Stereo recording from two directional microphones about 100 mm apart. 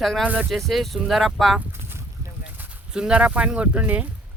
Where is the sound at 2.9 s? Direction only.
10° right (ahead or behind).